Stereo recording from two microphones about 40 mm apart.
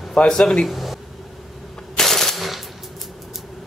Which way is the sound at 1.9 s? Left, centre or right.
Centre.